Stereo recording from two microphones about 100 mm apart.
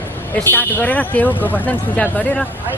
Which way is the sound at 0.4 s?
20° left (ahead or behind).